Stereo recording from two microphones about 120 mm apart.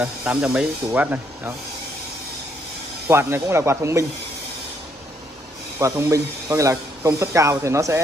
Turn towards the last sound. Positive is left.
turn(degrees=-25)  # may be behind; listen again after turning